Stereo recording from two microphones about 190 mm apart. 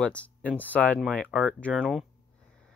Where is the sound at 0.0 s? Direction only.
5° left (ahead or behind).